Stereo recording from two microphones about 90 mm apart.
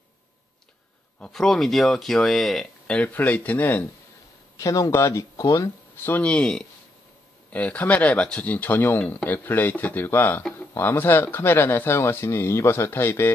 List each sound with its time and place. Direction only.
1.2 s speech: 5° left (ahead or behind)
3.0 s speech: 20° left (ahead or behind)
4.6 s speech: 35° left (ahead or behind)
6.0 s speech: 15° left (ahead or behind)